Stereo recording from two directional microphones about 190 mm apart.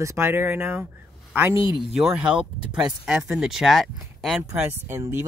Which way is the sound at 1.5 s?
25° left (ahead or behind).